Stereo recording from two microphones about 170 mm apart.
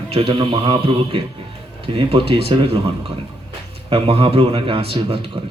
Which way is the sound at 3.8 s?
35° right (ahead or behind).